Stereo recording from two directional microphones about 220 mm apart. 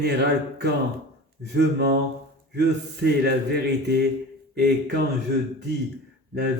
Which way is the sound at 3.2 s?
50° right (ahead or behind).